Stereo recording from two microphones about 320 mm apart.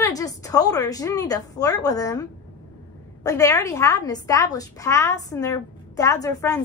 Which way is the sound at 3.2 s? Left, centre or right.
Centre.